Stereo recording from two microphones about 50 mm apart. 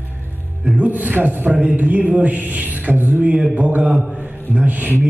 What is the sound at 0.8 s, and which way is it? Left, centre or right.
Music, right.